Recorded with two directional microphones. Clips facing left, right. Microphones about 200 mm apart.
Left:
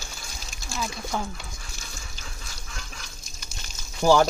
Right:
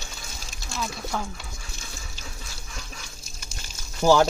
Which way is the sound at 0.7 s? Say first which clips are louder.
Even; centre (ahead or behind).